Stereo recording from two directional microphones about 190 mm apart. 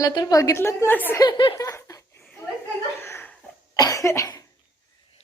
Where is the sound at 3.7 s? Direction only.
20° left (ahead or behind).